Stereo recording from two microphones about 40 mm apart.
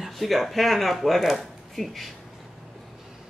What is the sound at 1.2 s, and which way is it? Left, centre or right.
Speech, centre.